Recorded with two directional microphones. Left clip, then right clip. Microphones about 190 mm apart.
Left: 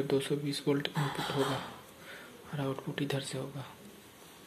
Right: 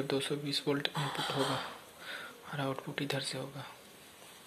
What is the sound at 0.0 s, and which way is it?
Speech, 10° right (ahead or behind).